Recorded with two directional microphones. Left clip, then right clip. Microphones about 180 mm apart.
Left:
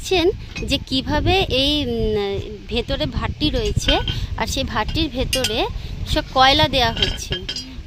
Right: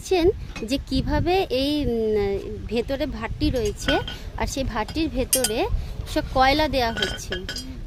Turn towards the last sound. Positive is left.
turn(degrees=-25)  # may be behind; listen again after turning